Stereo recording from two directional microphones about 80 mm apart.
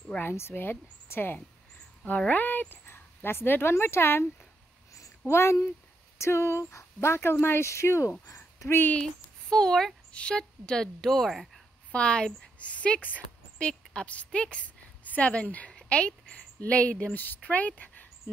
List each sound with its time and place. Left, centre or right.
0.2 s speech: left
5.3 s speech: left
9.0 s a woman's voice: centre
11.9 s a woman's voice: centre